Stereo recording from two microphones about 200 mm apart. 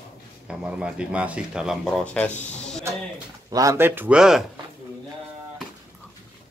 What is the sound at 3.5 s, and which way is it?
Speech, 15° right (ahead or behind).